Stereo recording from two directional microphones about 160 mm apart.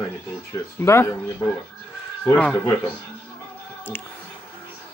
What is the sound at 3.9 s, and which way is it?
Speech, 15° left (ahead or behind).